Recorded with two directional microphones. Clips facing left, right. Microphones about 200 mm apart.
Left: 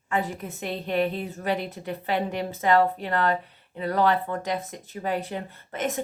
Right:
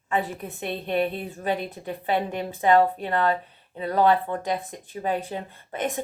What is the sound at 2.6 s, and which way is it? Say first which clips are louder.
Speech: right 2 dB; 20° right (ahead or behind).